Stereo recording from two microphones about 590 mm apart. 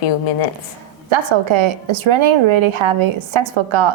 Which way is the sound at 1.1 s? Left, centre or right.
Right.